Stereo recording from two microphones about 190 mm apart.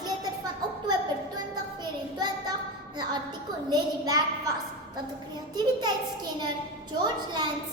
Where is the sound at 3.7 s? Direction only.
20° right (ahead or behind).